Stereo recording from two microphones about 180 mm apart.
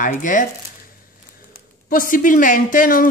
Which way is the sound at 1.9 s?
50° left (ahead or behind).